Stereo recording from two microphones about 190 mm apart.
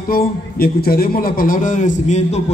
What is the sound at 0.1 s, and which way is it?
A man's voice, 50° left (ahead or behind).